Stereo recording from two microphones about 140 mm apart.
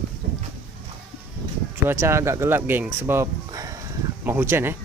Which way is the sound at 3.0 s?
20° right (ahead or behind).